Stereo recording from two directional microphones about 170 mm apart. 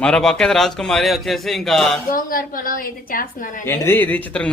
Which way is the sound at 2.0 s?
55° left (ahead or behind).